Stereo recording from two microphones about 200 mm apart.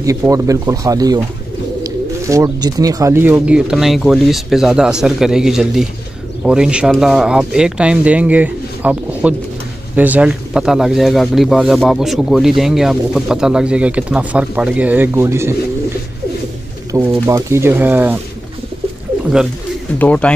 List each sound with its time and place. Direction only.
0.0 s speech: 15° right (ahead or behind)
16.9 s speech: 15° right (ahead or behind)
20.0 s speech: 5° left (ahead or behind)